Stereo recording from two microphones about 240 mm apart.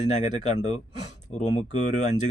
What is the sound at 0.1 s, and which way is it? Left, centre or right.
Speech, left.